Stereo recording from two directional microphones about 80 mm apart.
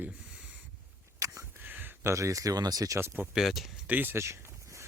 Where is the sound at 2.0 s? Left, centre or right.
Right.